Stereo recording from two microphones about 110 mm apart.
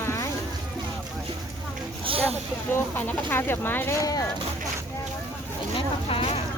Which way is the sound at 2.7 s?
20° left (ahead or behind).